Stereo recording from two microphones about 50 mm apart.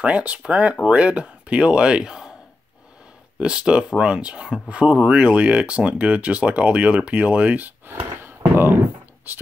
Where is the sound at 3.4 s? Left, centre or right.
Centre.